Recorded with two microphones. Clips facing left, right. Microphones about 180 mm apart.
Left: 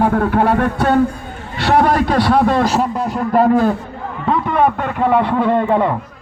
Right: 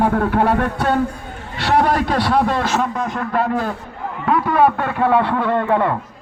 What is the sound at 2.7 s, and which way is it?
A man's voice, 35° left (ahead or behind).